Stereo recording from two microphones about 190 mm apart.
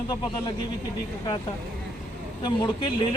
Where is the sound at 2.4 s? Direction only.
25° left (ahead or behind).